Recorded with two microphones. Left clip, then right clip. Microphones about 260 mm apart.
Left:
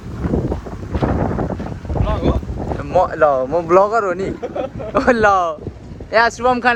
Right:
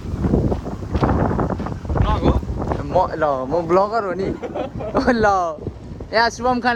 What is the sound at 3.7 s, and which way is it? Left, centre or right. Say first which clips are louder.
Speech: left 5 dB; left.